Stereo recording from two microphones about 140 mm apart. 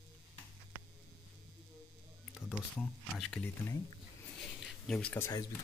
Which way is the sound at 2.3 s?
Centre (ahead or behind).